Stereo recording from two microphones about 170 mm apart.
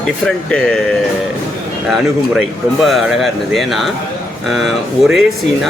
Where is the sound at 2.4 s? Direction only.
Centre (ahead or behind).